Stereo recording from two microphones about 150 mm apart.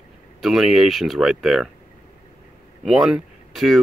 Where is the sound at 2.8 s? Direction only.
5° right (ahead or behind).